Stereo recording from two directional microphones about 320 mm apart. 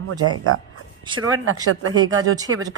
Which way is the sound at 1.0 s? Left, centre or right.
Centre.